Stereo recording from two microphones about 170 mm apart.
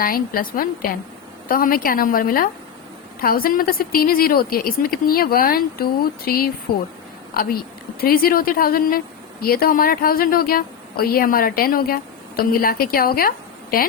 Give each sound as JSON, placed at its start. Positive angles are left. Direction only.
{"t": 0.0, "sound": "a woman's voice", "side_deg": 55}
{"t": 8.0, "sound": "a woman's voice", "side_deg": 60}